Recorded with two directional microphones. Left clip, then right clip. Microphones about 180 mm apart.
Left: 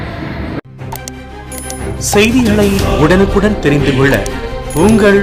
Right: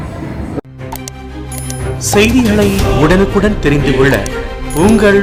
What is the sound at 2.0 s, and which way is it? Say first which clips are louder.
Speech: even; centre (ahead or behind).